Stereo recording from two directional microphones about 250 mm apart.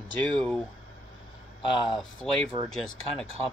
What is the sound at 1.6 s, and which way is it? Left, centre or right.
Speech, centre.